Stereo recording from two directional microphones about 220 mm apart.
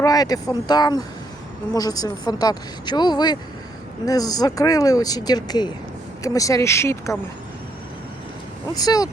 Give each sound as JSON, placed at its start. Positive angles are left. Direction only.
{"t": 0.0, "sound": "speech", "side_deg": 15}
{"t": 8.7, "sound": "speech", "side_deg": 15}